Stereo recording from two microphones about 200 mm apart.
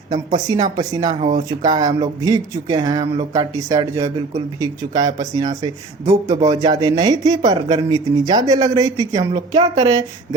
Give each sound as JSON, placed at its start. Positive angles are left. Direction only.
{"t": 0.3, "sound": "speech", "side_deg": -20}